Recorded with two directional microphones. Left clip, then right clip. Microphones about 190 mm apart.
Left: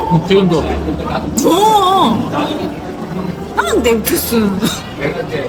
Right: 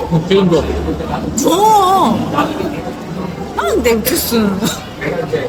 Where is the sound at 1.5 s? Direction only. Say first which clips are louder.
Even; 20° right (ahead or behind).